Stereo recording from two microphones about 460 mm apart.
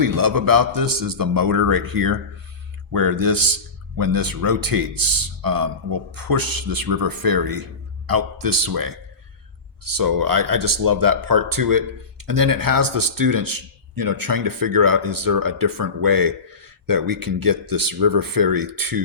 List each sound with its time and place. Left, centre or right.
0.0 s speech: right